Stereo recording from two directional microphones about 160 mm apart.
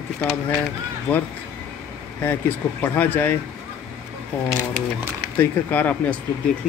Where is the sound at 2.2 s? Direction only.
10° left (ahead or behind).